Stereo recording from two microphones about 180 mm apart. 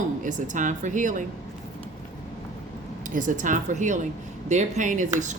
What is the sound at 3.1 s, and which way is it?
Speech, 45° right (ahead or behind).